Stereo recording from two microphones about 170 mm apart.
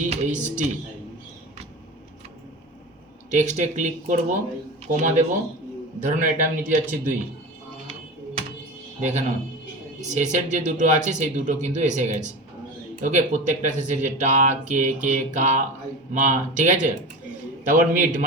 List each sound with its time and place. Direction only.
0.0 s speech: 45° right (ahead or behind)
3.2 s speech: 45° right (ahead or behind)
9.0 s speech: 45° right (ahead or behind)